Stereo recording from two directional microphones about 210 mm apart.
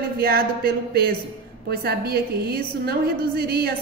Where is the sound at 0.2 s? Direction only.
45° right (ahead or behind).